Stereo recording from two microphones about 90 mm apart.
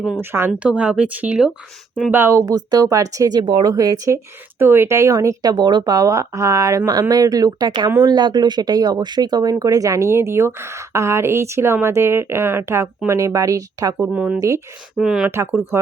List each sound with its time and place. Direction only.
0.2 s speech: 25° right (ahead or behind)
0.6 s speech: 15° right (ahead or behind)
2.0 s speech: 25° right (ahead or behind)
2.5 s speech: 45° right (ahead or behind)
8.0 s speech: 55° right (ahead or behind)
14.1 s speech: 15° right (ahead or behind)
14.3 s speech: 35° right (ahead or behind)
14.9 s speech: 5° right (ahead or behind)